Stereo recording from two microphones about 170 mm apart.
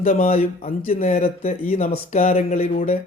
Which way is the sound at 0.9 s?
55° left (ahead or behind).